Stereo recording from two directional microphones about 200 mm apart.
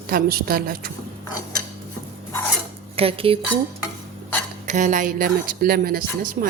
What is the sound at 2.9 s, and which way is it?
Speech, 30° right (ahead or behind).